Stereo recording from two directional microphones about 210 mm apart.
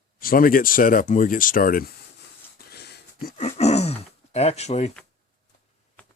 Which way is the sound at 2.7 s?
50° left (ahead or behind).